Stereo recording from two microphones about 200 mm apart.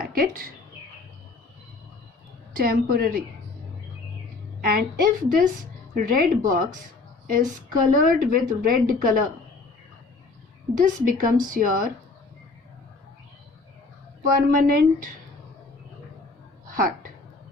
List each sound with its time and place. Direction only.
0.0 s speech: 45° right (ahead or behind)
2.6 s a woman's voice: 45° right (ahead or behind)
4.6 s a woman's voice: 50° right (ahead or behind)
7.9 s a woman's voice: 45° right (ahead or behind)
10.8 s a woman's voice: 45° right (ahead or behind)
14.2 s a woman's voice: 45° right (ahead or behind)
16.7 s speech: 45° right (ahead or behind)